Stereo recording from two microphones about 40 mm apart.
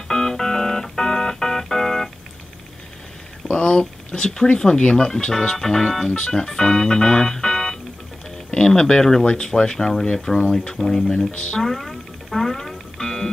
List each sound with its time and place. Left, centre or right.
0.1 s music: centre
3.5 s a sound: left
4.5 s speech: left
6.1 s speech: left
11.6 s music: centre